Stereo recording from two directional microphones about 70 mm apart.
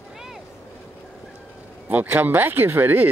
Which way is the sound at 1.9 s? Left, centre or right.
Right.